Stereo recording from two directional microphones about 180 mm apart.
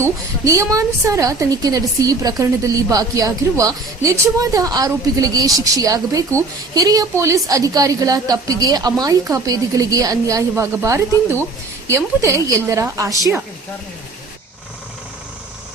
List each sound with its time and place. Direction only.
0.0 s a woman's voice: 15° right (ahead or behind)